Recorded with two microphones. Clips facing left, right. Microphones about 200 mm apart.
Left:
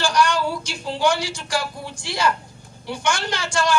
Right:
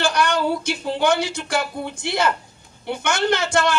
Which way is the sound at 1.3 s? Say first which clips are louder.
Right 2 dB; 60° right (ahead or behind).